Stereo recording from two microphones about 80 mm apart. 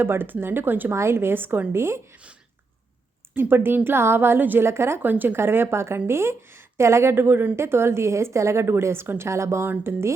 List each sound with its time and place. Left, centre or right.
0.0 s a woman's voice: right
3.3 s a woman's voice: right